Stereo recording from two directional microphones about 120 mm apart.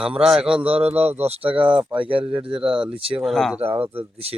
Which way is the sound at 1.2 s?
55° right (ahead or behind).